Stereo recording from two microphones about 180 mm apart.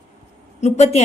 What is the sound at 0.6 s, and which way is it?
Speech, 40° left (ahead or behind).